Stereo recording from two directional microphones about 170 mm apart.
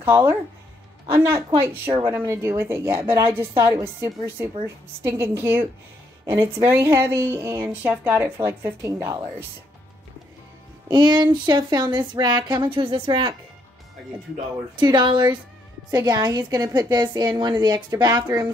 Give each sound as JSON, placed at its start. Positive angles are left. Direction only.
{"t": 0.0, "sound": "a woman's voice", "side_deg": -10}
{"t": 10.9, "sound": "speech", "side_deg": -25}